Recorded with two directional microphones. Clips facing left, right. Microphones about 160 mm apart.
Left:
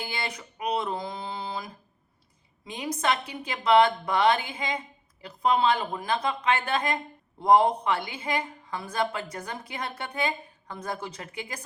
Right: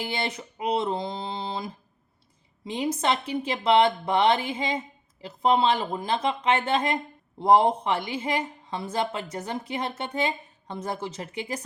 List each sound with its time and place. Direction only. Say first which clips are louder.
0.0 s speech: right 4 dB; 25° right (ahead or behind)